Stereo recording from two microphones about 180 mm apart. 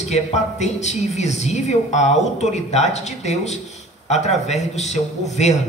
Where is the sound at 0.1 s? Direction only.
40° left (ahead or behind).